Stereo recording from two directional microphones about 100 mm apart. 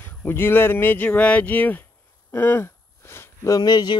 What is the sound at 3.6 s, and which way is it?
Speech, 45° left (ahead or behind).